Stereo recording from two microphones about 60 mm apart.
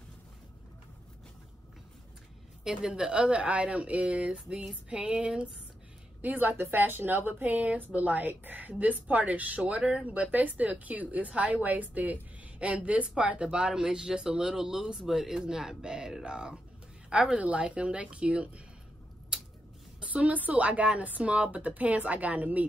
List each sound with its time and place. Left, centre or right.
2.6 s a woman's voice: centre
20.1 s a woman's voice: right